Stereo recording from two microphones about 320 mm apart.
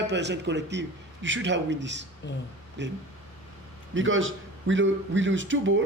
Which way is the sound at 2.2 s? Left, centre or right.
Left.